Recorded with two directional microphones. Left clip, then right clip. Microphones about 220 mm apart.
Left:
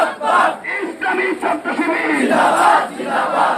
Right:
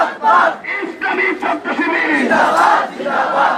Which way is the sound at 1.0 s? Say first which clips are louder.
Right 2 dB; 20° right (ahead or behind).